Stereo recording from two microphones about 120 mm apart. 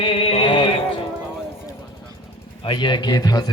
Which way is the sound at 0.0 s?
55° left (ahead or behind).